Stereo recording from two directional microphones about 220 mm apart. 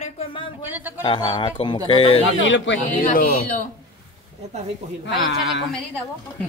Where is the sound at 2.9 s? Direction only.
40° left (ahead or behind).